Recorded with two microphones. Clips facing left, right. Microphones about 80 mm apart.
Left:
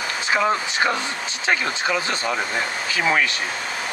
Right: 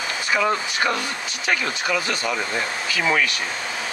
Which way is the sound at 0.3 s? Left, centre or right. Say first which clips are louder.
Left 1 dB; left.